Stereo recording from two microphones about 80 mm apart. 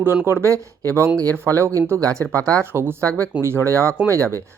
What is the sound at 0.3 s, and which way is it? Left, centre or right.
Speech, right.